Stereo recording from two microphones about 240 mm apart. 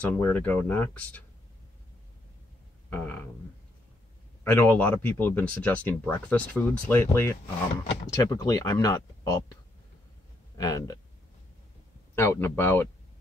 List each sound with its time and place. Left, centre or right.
0.0 s speech: centre
2.9 s speech: centre
4.5 s speech: centre
10.6 s speech: centre
12.2 s speech: centre